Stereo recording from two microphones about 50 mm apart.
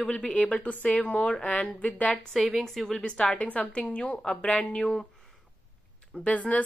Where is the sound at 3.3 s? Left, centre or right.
Left.